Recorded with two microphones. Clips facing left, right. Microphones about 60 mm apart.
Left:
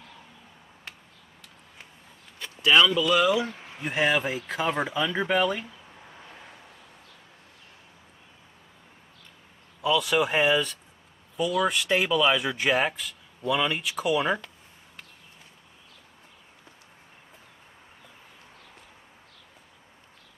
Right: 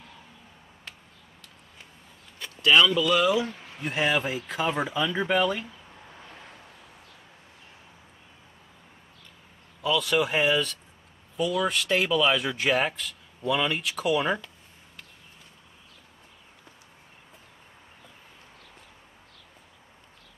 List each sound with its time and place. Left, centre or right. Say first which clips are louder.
2.5 s speech: even; centre
3.4 s a sound: even; centre
3.8 s speech: left 1 dB; centre
6.1 s vehicle: even; centre
9.8 s speech: left 1 dB; centre